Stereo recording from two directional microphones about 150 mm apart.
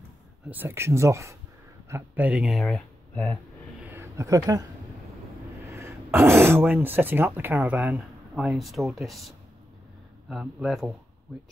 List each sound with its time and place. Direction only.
0.5 s speech: 15° right (ahead or behind); by 3.3 s 5° left (ahead or behind)
3.8 s a sound: 15° right (ahead or behind)
5.7 s speech: 20° right (ahead or behind); by 9.3 s centre (ahead or behind)
10.3 s speech: centre (ahead or behind)